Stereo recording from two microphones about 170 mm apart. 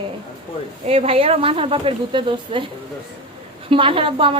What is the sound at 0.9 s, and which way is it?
A woman's voice, 35° right (ahead or behind).